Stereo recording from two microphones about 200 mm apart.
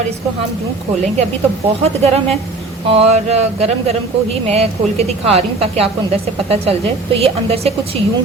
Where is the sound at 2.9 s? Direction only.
30° right (ahead or behind).